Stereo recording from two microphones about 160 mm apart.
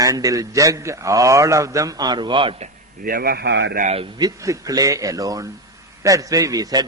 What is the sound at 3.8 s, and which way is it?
Speech, 40° right (ahead or behind).